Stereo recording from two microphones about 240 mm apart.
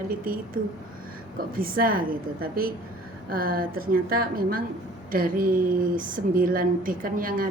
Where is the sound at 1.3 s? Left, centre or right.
Right.